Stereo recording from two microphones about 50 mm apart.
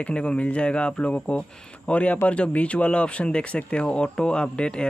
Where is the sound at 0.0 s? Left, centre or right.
Left.